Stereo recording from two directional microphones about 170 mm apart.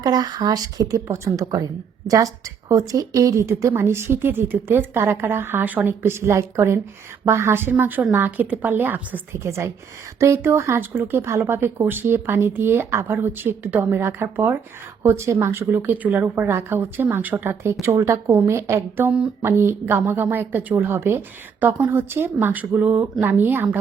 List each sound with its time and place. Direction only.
0.0 s a woman's voice: 25° right (ahead or behind)